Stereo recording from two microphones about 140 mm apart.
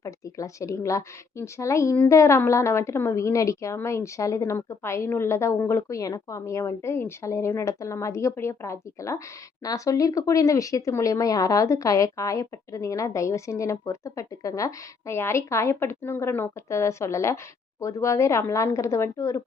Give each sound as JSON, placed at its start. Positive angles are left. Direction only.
{"t": 0.0, "sound": "speech", "side_deg": 20}